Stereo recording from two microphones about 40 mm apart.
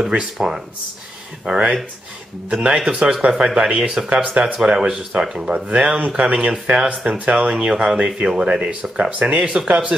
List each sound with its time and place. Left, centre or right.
0.0 s speech: centre
4.1 s speech: right
4.6 s speech: right
5.5 s speech: right